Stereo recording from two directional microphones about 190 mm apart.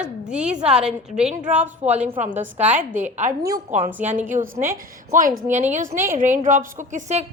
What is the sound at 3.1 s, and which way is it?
Speech, 40° right (ahead or behind).